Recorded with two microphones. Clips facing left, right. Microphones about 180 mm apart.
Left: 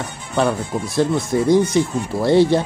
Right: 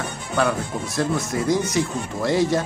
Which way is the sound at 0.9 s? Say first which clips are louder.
Left 5 dB; 30° left (ahead or behind).